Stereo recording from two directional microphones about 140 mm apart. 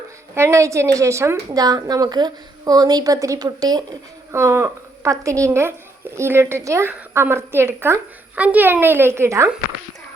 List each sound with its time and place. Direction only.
0.3 s a woman's voice: 20° right (ahead or behind)